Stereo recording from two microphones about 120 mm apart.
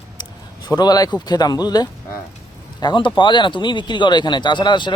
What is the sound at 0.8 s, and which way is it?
Speech, 30° left (ahead or behind).